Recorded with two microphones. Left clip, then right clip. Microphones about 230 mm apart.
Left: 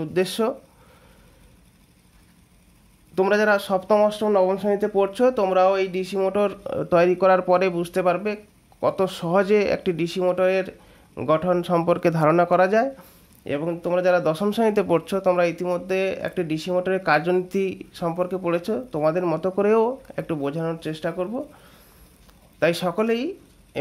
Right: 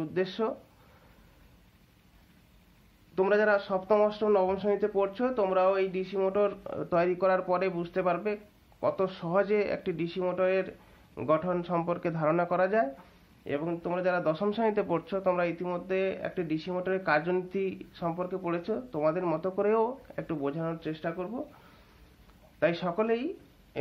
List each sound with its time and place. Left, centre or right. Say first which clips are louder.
0.0 s speech: left 8 dB; left
3.2 s speech: left 6 dB; left
22.6 s speech: left 6 dB; left